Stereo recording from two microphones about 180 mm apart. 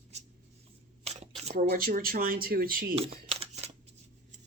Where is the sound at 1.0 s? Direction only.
35° right (ahead or behind).